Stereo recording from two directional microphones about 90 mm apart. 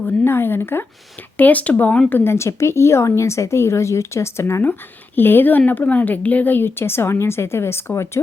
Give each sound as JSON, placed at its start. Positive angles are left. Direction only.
{"t": 0.0, "sound": "speech", "side_deg": 25}